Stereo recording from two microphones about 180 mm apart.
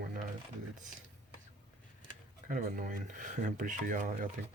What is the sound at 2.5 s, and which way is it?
Speech, 45° right (ahead or behind).